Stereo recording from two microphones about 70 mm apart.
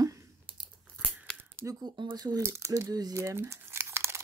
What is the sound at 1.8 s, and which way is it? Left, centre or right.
Speech, right.